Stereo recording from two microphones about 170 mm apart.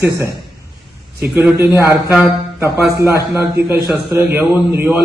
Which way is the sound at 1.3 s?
10° right (ahead or behind).